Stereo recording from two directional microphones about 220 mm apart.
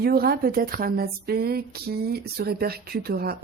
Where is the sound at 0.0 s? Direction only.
45° right (ahead or behind).